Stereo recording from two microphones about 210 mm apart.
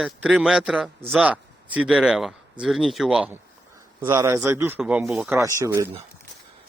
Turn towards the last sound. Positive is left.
turn(degrees=-15)  # may be behind; listen again after turning